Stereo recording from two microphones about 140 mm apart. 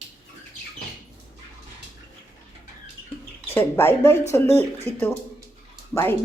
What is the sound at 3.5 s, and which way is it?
Speech, 15° left (ahead or behind).